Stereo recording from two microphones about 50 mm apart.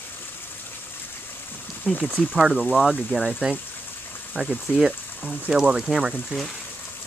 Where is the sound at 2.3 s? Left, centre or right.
Centre.